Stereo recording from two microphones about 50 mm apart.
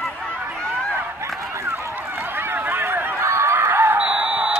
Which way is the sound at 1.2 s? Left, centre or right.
Right.